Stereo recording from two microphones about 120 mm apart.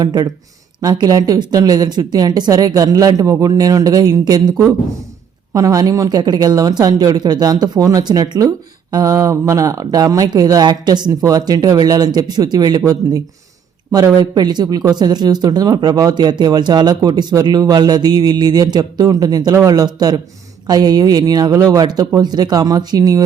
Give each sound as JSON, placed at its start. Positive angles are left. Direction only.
{"t": 0.0, "sound": "speech", "side_deg": -35}